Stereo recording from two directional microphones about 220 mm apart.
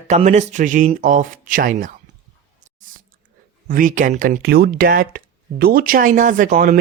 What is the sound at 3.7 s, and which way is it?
Speech, 40° right (ahead or behind).